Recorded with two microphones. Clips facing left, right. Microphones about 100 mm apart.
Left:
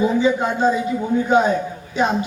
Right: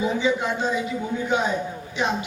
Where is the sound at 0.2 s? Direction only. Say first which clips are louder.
Left 6 dB; 40° left (ahead or behind).